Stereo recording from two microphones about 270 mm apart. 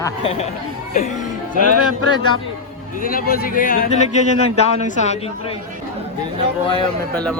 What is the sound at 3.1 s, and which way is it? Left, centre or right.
Speech, left.